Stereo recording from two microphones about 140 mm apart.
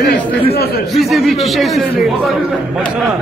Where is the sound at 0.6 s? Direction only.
90° left.